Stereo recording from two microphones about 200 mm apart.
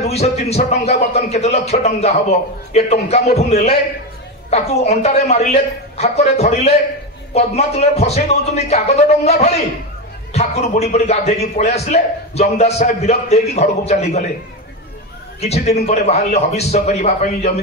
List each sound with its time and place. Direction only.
0.0 s a man's voice: 30° left (ahead or behind)
15.4 s a man's voice: 30° left (ahead or behind)